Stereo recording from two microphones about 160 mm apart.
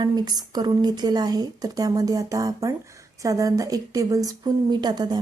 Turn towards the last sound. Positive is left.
turn(degrees=-25)  # may be behind; listen again after turning